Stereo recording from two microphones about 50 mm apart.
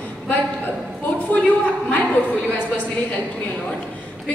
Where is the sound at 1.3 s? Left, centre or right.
Left.